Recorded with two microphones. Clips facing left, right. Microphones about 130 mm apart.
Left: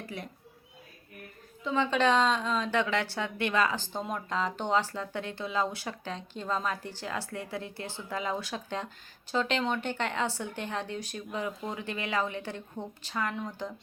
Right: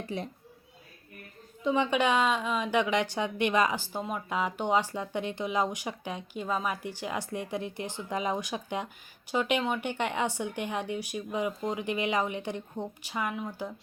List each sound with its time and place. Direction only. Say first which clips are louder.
0.0 s speech: right 5 dB; 25° right (ahead or behind)
1.6 s a woman's voice: right 1 dB; 15° right (ahead or behind)